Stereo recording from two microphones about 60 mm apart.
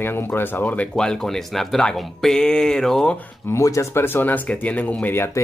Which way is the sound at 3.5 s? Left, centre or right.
Left.